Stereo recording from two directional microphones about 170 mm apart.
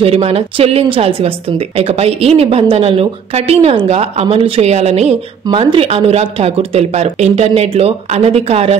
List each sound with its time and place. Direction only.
0.0 s a woman's voice: 35° right (ahead or behind)